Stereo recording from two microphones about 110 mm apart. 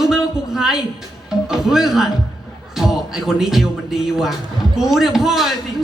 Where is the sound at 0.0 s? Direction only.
5° right (ahead or behind).